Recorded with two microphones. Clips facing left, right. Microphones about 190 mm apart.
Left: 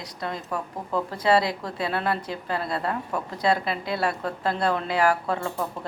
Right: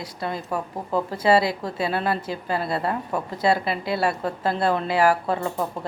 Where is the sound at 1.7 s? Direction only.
5° right (ahead or behind).